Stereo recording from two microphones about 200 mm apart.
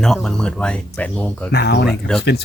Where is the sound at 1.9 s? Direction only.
Centre (ahead or behind).